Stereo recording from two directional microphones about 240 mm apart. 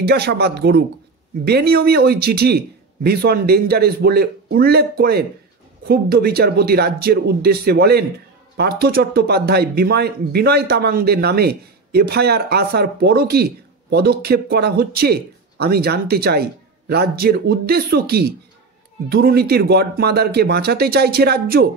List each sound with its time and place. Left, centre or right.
0.0 s speech: right